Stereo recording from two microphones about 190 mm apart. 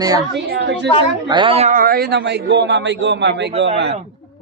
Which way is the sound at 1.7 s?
50° right (ahead or behind).